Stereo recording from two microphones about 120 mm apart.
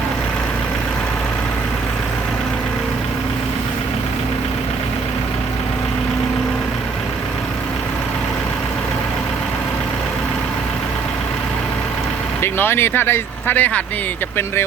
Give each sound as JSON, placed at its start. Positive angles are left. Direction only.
{"t": 12.4, "sound": "speech", "side_deg": 20}